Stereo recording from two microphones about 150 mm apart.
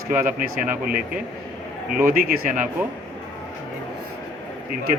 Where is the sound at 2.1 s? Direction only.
70° right (ahead or behind).